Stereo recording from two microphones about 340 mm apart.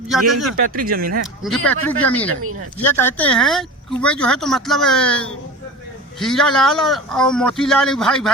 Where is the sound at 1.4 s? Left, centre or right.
Centre.